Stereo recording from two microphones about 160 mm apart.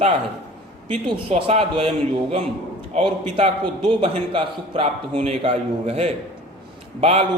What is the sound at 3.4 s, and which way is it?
A man's voice, 35° right (ahead or behind).